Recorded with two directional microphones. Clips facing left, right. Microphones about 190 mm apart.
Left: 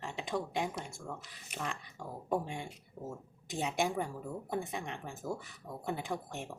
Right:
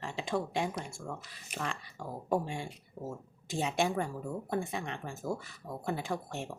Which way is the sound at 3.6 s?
15° left (ahead or behind).